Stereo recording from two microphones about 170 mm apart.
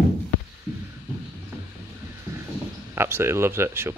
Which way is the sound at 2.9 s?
15° right (ahead or behind).